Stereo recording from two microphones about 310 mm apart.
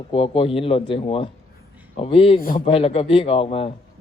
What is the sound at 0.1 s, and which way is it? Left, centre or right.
A man's voice, centre.